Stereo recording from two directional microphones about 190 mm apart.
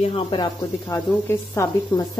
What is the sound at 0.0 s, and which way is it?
Speech, 30° left (ahead or behind).